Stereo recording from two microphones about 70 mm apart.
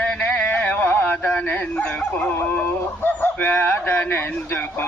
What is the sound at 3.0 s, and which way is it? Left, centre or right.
Speech, left.